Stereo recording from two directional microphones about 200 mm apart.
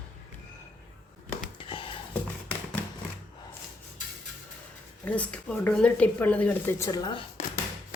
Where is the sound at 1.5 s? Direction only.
25° left (ahead or behind).